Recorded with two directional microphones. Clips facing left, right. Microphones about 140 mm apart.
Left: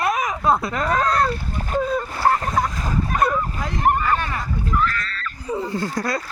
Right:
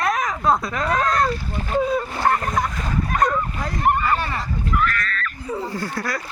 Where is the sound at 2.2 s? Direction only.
5° left (ahead or behind).